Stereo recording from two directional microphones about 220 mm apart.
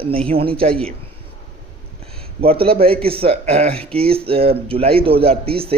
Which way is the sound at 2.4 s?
25° right (ahead or behind).